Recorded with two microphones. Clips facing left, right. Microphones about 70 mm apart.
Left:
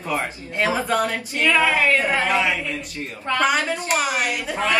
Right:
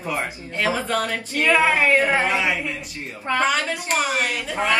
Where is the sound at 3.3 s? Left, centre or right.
Right.